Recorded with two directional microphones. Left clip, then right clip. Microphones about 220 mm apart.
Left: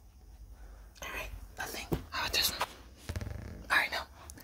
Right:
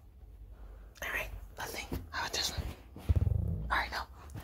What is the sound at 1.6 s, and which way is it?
Whispering, centre (ahead or behind).